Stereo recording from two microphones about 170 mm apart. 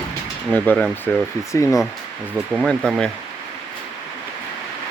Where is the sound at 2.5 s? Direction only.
Centre (ahead or behind).